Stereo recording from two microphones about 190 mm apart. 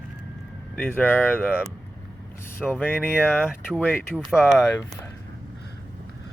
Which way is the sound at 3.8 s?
10° left (ahead or behind).